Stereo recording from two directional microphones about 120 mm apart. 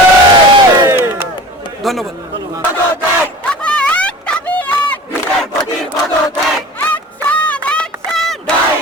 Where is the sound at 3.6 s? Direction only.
10° left (ahead or behind).